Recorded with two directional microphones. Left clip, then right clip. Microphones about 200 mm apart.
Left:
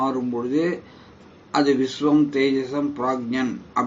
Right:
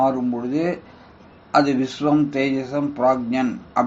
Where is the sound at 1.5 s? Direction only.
15° right (ahead or behind).